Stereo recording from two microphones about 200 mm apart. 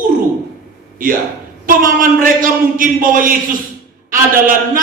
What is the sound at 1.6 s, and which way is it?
A man's voice, 40° right (ahead or behind).